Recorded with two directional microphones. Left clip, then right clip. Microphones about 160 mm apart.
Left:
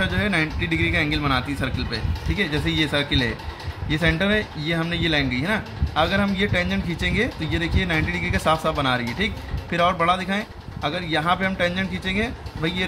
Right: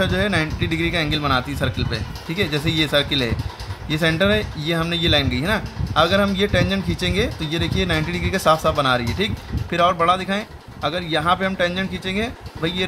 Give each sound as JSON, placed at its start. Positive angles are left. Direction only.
{"t": 0.0, "sound": "a man's voice", "side_deg": -45}